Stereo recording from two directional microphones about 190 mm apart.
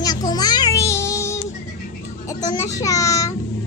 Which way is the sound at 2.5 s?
15° left (ahead or behind).